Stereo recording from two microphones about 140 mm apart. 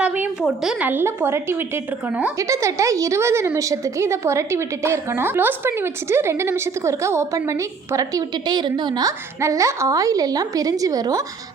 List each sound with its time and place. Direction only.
0.0 s a sound: 10° right (ahead or behind)
0.4 s a woman's voice: 5° right (ahead or behind)
2.4 s a woman's voice: 20° right (ahead or behind)